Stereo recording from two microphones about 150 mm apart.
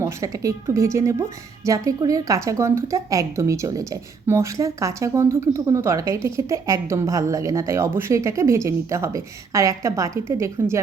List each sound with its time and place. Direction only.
0.0 s a woman's voice: 20° right (ahead or behind)